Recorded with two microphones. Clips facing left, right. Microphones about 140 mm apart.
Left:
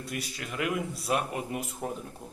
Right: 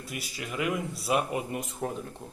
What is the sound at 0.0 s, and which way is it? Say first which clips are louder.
Speech: left 1 dB; centre (ahead or behind).